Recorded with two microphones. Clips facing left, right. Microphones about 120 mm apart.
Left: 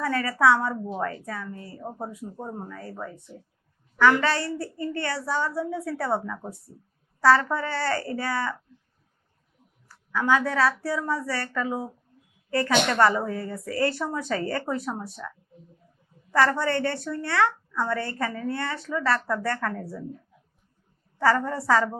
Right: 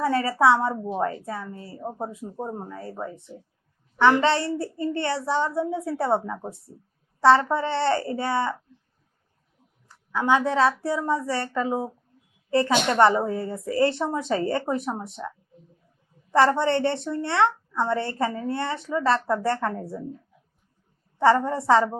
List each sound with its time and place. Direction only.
0.0 s a woman's voice: 25° right (ahead or behind)
9.9 s a woman's voice: 20° right (ahead or behind)
16.3 s a woman's voice: 25° right (ahead or behind)
21.2 s a woman's voice: 25° right (ahead or behind)